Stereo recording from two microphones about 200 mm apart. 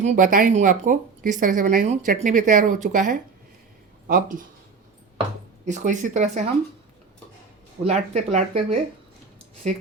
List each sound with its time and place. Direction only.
0.0 s speech: 40° right (ahead or behind)
5.6 s speech: 40° right (ahead or behind)
7.9 s speech: 30° right (ahead or behind)